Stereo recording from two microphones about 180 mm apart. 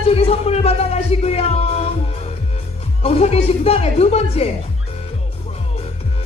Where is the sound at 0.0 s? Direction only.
35° left (ahead or behind).